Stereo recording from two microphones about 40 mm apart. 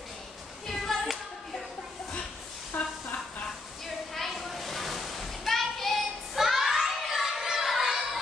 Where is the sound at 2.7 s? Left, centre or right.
Left.